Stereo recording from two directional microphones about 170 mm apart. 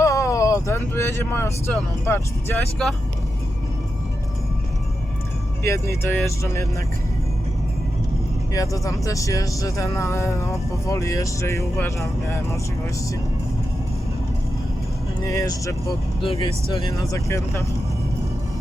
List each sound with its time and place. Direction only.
0.0 s speech: 20° left (ahead or behind)
6.0 s speech: 15° left (ahead or behind)
8.5 s speech: 20° left (ahead or behind)
15.2 s speech: 20° left (ahead or behind)
16.2 s speech: 35° left (ahead or behind)
16.8 s speech: 20° left (ahead or behind)